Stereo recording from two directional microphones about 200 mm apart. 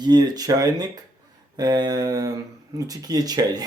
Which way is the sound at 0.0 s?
20° right (ahead or behind).